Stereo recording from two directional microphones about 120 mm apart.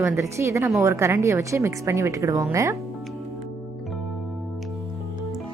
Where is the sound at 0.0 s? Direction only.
20° right (ahead or behind).